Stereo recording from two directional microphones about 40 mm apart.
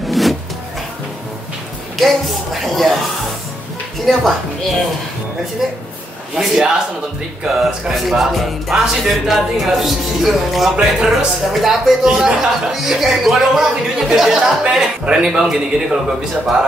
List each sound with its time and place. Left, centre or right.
0.1 s a sound: centre
2.0 s speech: centre
4.0 s speech: centre
6.3 s speech: centre
10.8 s speech: centre
12.7 s speech: centre